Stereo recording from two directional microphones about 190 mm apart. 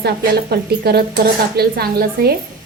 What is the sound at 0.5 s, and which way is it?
A woman's voice, 55° right (ahead or behind).